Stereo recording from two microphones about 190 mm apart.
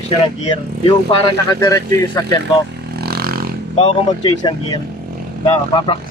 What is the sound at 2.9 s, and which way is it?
Vehicle, 55° right (ahead or behind).